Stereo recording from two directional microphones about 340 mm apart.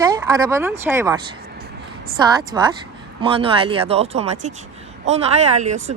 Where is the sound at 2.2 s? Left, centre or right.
Centre.